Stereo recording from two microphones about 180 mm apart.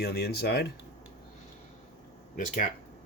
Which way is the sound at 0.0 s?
65° left (ahead or behind).